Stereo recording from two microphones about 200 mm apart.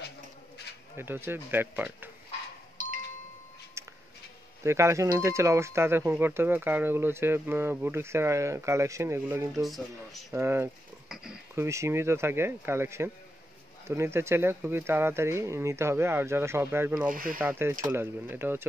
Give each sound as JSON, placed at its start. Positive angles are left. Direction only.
{"t": 0.9, "sound": "speech", "side_deg": -10}
{"t": 2.8, "sound": "music", "side_deg": -45}
{"t": 3.8, "sound": "music", "side_deg": -15}
{"t": 4.6, "sound": "speech", "side_deg": -15}
{"t": 9.6, "sound": "speech", "side_deg": 0}
{"t": 10.3, "sound": "speech", "side_deg": -10}
{"t": 17.1, "sound": "speech", "side_deg": -45}
{"t": 17.4, "sound": "speech", "side_deg": -10}